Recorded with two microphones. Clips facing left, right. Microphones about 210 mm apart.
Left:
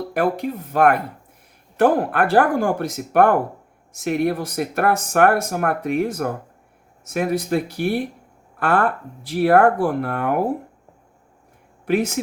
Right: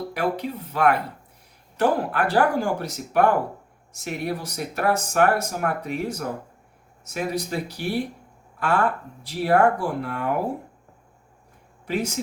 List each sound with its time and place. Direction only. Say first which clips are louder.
0.1 s speech: left 6 dB; 50° left (ahead or behind)
11.9 s speech: left 6 dB; 55° left (ahead or behind)